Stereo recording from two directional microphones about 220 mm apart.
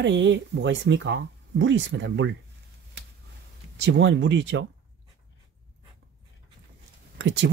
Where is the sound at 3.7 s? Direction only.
55° right (ahead or behind).